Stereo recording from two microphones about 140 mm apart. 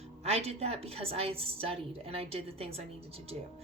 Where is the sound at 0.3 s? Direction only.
45° right (ahead or behind).